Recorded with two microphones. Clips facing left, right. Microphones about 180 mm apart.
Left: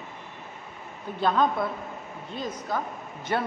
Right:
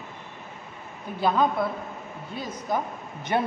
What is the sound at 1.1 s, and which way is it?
A man's voice, 10° right (ahead or behind).